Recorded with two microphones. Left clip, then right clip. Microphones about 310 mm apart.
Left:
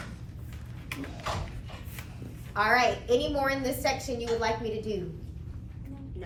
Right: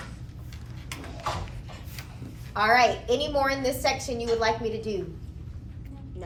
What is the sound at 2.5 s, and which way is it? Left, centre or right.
A woman's voice, centre.